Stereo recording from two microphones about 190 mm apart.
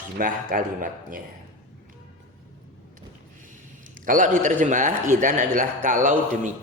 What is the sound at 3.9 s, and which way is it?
A man's voice, 45° right (ahead or behind).